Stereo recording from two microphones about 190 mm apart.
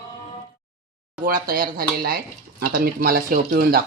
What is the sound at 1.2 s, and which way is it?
Speech, 50° right (ahead or behind).